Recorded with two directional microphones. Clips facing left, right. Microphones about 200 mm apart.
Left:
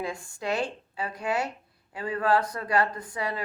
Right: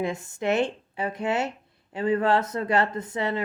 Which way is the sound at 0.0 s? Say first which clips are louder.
Right 5 dB; 20° right (ahead or behind).